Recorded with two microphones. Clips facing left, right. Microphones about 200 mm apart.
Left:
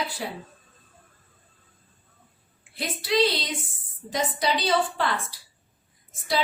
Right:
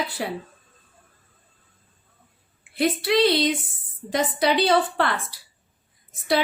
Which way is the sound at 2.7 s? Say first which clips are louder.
Right 5 dB; 60° right (ahead or behind).